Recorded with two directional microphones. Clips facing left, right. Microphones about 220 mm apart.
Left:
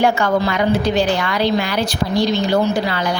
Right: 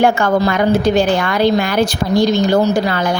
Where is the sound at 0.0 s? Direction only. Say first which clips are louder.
Right 3 dB; 50° right (ahead or behind).